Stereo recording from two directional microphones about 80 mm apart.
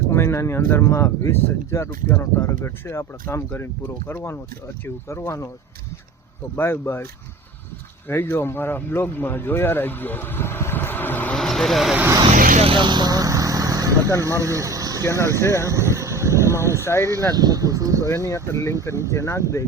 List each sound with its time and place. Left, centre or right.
0.1 s speech: left
6.6 s speech: left
11.3 s vehicle: centre
12.7 s vehicle: right
14.2 s speech: right
15.0 s speech: left
15.7 s vehicle: right
16.8 s speech: left
17.3 s a sound: right
18.1 s speech: left